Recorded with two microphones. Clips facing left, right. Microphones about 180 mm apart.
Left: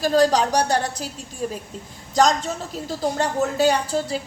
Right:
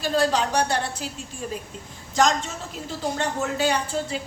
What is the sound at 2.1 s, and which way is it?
Speech, 40° left (ahead or behind).